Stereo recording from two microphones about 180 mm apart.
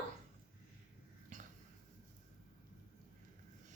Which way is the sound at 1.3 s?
45° right (ahead or behind).